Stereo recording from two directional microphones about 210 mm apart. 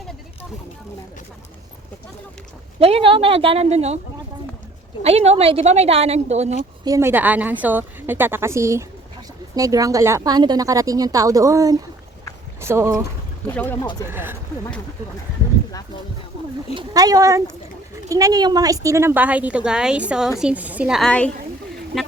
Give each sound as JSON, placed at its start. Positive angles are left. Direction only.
{"t": 2.7, "sound": "speech", "side_deg": -25}
{"t": 5.0, "sound": "speech", "side_deg": -30}
{"t": 6.8, "sound": "speech", "side_deg": -15}
{"t": 14.1, "sound": "speech", "side_deg": -10}
{"t": 16.7, "sound": "a woman's voice", "side_deg": -20}